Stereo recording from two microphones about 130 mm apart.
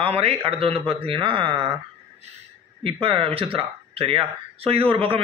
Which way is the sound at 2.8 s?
45° right (ahead or behind).